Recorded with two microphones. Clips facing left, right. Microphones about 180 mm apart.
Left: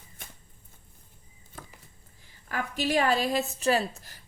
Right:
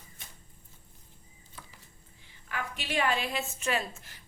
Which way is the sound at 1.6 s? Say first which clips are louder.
Left 5 dB; 45° left (ahead or behind).